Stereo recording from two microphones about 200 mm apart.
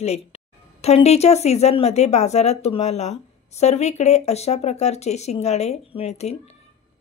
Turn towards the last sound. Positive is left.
turn(degrees=35)  # may be behind; listen again after turning